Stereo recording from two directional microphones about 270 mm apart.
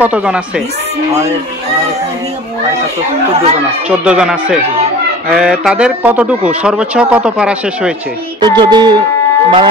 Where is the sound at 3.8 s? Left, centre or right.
Centre.